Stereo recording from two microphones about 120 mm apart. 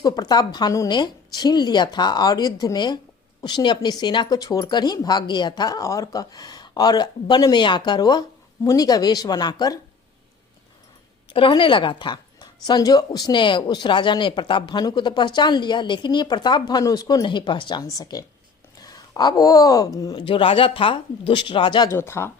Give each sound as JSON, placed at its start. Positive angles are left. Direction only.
{"t": 0.0, "sound": "a woman's voice", "side_deg": 35}
{"t": 11.3, "sound": "a woman's voice", "side_deg": 45}
{"t": 20.1, "sound": "speech", "side_deg": 45}
{"t": 21.8, "sound": "speech", "side_deg": 20}